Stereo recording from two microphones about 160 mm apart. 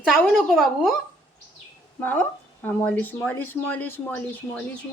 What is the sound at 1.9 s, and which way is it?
A woman's voice, 10° left (ahead or behind).